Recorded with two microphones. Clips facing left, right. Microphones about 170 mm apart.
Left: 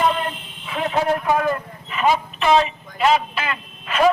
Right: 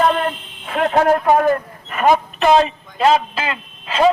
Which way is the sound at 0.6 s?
55° right (ahead or behind).